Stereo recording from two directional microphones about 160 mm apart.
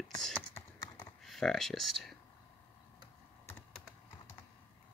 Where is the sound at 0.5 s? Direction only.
20° left (ahead or behind).